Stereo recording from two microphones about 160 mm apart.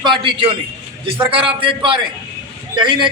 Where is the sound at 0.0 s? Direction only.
30° right (ahead or behind).